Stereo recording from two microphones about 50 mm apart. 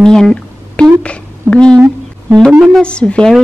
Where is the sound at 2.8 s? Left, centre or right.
Left.